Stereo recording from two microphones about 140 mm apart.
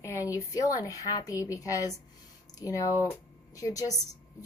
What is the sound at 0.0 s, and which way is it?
A woman's voice, 20° left (ahead or behind).